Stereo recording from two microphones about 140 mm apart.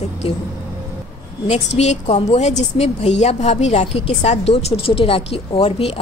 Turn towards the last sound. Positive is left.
turn(degrees=45)  # may be behind; listen again after turning